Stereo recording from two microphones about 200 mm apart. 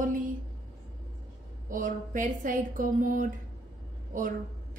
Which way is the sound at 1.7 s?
40° right (ahead or behind).